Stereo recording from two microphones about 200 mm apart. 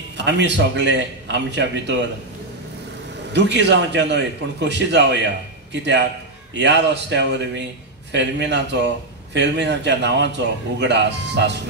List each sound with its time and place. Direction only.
0.2 s a man's voice: 60° right (ahead or behind)
3.3 s a man's voice: 60° right (ahead or behind)